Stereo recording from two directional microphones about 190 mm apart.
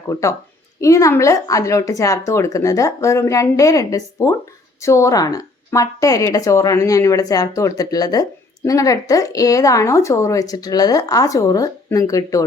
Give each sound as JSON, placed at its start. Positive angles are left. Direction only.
{"t": 0.1, "sound": "a woman's voice", "side_deg": 15}